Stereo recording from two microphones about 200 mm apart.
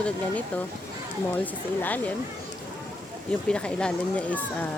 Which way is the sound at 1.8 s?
10° left (ahead or behind).